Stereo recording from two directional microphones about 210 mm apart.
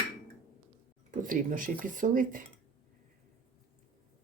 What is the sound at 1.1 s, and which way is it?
Speech, 40° right (ahead or behind).